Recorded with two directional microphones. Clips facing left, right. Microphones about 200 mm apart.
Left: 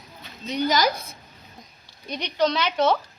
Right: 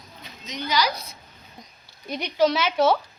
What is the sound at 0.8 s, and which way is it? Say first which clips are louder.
Speech: left 2 dB; 50° left (ahead or behind).